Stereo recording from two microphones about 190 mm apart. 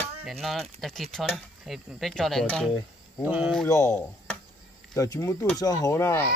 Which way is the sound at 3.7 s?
15° left (ahead or behind).